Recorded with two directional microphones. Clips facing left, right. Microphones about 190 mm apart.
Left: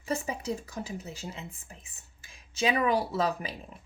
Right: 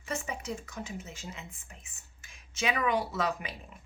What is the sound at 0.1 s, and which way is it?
Speech, 35° left (ahead or behind).